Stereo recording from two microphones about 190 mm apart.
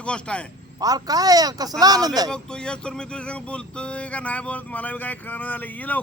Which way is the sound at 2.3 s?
5° left (ahead or behind).